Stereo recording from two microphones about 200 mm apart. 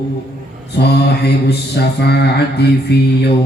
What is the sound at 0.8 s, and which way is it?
Mantra, 55° left (ahead or behind).